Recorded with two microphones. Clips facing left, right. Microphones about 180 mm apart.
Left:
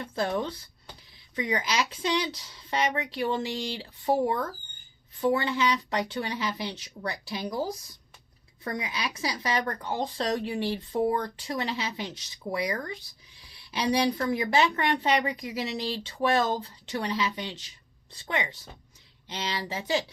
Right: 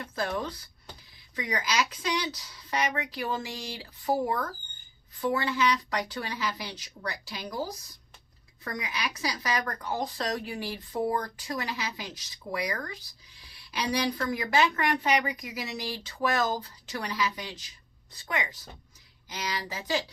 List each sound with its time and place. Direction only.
0.0 s speech: 25° left (ahead or behind)
8.6 s speech: 25° left (ahead or behind)